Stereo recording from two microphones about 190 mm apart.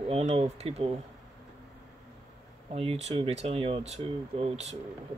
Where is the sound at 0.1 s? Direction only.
35° right (ahead or behind).